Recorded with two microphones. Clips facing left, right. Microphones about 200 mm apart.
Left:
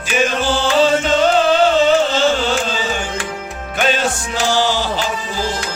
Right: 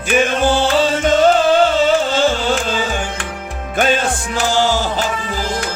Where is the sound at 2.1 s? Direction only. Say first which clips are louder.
Even; 50° right (ahead or behind).